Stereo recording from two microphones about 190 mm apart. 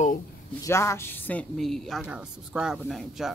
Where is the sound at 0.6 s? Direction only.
15° left (ahead or behind); by 3.3 s centre (ahead or behind).